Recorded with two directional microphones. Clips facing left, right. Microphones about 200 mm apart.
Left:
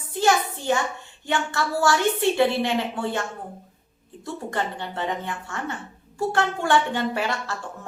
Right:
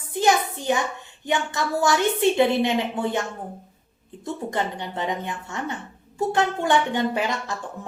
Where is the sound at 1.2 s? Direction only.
15° right (ahead or behind).